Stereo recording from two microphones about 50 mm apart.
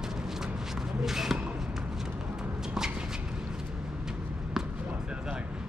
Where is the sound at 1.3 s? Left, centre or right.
Right.